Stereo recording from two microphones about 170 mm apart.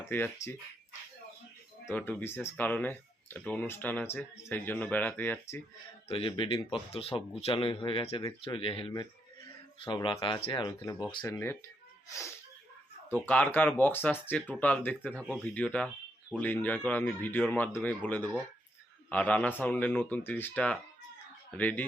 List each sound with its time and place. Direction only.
0.0 s speech: 15° left (ahead or behind)
1.9 s speech: 10° left (ahead or behind)
6.1 s speech: 30° left (ahead or behind)
11.2 s speech: 15° left (ahead or behind)